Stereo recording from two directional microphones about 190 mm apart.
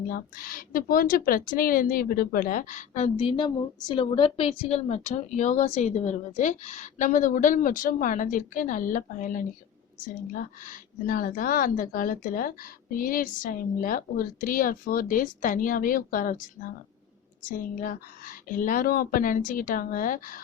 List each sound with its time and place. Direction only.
0.1 s speech: 50° left (ahead or behind)